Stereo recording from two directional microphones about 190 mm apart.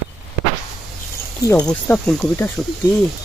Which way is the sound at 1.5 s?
10° left (ahead or behind).